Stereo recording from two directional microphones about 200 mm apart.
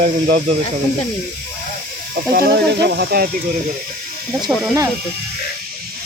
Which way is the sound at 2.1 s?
50° right (ahead or behind).